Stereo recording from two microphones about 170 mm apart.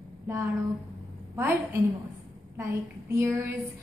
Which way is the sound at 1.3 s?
15° right (ahead or behind).